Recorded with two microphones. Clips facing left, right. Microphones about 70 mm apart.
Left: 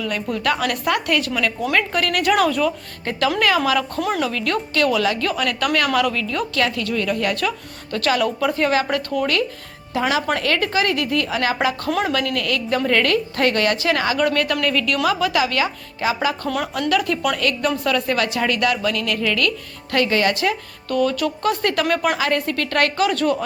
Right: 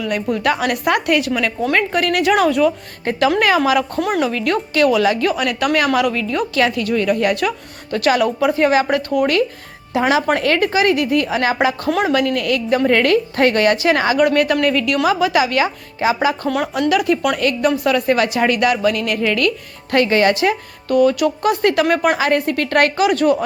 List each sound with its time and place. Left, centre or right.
0.0 s a woman's voice: centre
3.0 s a woman's voice: right
4.0 s a woman's voice: centre
4.3 s speech: right
10.0 s speech: right
11.9 s a woman's voice: centre
12.3 s speech: right
14.3 s speech: centre
16.5 s a woman's voice: centre